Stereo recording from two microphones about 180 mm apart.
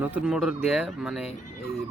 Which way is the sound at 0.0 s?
5° right (ahead or behind).